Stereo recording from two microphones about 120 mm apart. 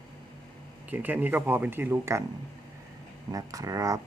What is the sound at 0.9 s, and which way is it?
Speech, 15° right (ahead or behind).